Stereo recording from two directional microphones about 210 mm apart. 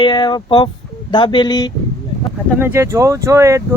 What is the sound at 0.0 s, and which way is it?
Speech, 20° left (ahead or behind).